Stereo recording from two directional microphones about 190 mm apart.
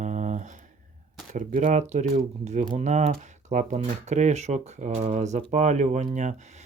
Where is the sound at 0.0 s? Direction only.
40° right (ahead or behind).